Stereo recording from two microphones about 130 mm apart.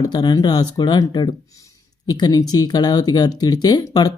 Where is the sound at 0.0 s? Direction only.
35° left (ahead or behind).